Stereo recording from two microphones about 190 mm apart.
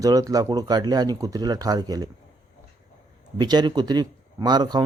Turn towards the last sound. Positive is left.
turn(degrees=-20)  # may be behind; listen again after turning